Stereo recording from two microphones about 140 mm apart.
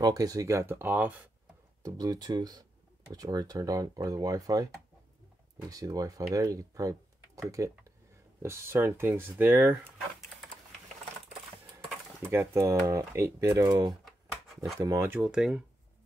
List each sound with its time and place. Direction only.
0.0 s speech: 25° right (ahead or behind)
1.8 s speech: 25° right (ahead or behind)
5.7 s speech: 25° right (ahead or behind)
12.2 s speech: 15° right (ahead or behind)
13.8 s typing: centre (ahead or behind)
14.8 s speech: 20° right (ahead or behind); by 15.6 s 5° right (ahead or behind)